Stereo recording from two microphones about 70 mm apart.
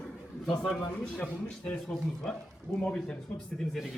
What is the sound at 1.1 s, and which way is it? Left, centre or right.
Speech, centre.